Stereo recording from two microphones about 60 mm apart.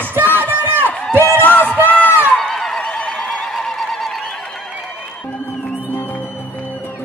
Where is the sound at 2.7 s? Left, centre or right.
Left.